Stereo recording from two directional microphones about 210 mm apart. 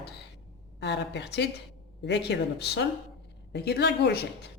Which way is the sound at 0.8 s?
55° left (ahead or behind).